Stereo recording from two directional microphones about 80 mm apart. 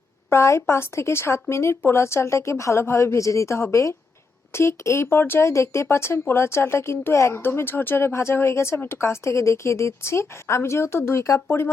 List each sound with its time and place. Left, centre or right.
0.3 s speech: left